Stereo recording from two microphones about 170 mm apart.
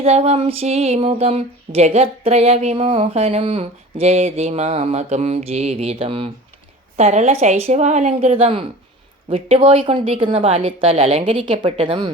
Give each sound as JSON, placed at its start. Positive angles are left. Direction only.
{"t": 0.0, "sound": "speech", "side_deg": -35}